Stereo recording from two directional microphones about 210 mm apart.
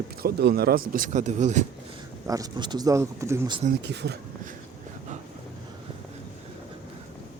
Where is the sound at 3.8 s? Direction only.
55° right (ahead or behind).